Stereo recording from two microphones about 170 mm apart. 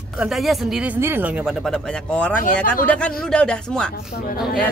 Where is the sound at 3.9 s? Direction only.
60° left (ahead or behind).